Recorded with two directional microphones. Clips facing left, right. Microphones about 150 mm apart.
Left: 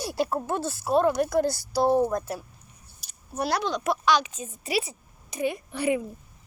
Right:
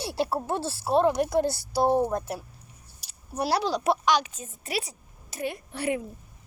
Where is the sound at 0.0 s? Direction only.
30° right (ahead or behind).